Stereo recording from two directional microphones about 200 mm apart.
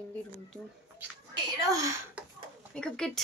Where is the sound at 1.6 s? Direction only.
15° right (ahead or behind).